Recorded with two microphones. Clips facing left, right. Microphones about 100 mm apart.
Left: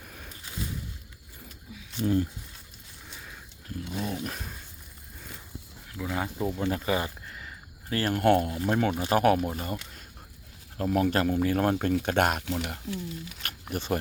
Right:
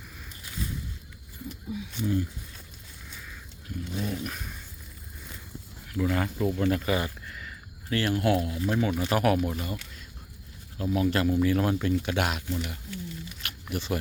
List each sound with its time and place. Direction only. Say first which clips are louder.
2.0 s speech: left 3 dB; 50° left (ahead or behind)
3.9 s dog: even; 35° left (ahead or behind)
6.0 s speech: right 4 dB; 10° left (ahead or behind)
6.6 s a sound: right 1 dB; 25° left (ahead or behind)
8.1 s speech: left 5 dB; 55° left (ahead or behind)
10.8 s speech: left 1 dB; 50° left (ahead or behind)
12.5 s speech: left 1 dB; 85° left
13.4 s speech: even; 45° left (ahead or behind)